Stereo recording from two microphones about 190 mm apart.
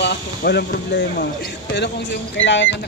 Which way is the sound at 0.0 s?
60° left (ahead or behind).